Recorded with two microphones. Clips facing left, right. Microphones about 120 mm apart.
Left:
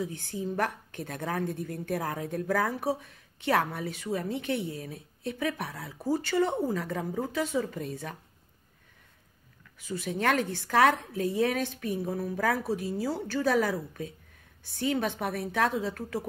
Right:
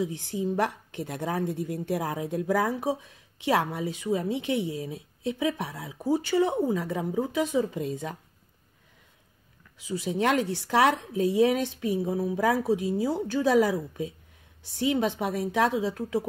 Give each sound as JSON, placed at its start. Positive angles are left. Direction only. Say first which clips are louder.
{"t": 0.2, "sound": "a woman's voice", "louder": "right 3 dB", "side_deg": -15}
{"t": 9.8, "sound": "a woman's voice", "louder": "right 4 dB", "side_deg": -15}